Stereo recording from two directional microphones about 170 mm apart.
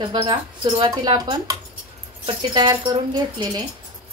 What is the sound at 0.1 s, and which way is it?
A woman's voice, 25° right (ahead or behind).